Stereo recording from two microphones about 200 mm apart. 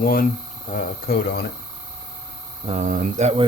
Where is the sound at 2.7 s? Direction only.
40° right (ahead or behind).